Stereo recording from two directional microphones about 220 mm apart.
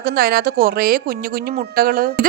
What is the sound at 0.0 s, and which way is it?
A woman's voice, 45° right (ahead or behind).